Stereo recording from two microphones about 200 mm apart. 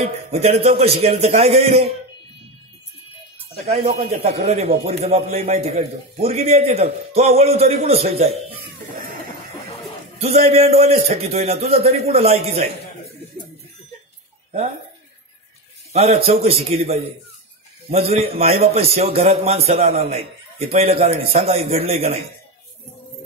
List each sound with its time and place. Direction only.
0.0 s a man's voice: 30° right (ahead or behind)
3.6 s a man's voice: 30° right (ahead or behind)
10.1 s a man's voice: 30° right (ahead or behind)
15.9 s a man's voice: 30° right (ahead or behind)